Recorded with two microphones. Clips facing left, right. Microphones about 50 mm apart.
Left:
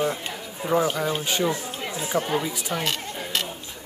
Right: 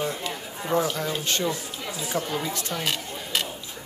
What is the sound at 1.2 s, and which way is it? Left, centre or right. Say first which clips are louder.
Speech: left 2 dB; centre.